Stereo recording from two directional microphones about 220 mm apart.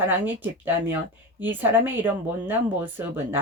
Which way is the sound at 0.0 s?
10° right (ahead or behind).